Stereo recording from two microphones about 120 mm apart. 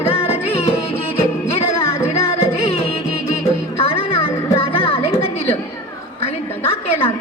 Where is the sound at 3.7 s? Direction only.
50° left (ahead or behind).